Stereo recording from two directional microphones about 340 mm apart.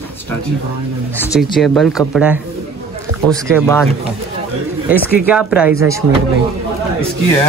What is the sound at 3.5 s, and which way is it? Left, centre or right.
Speech, centre.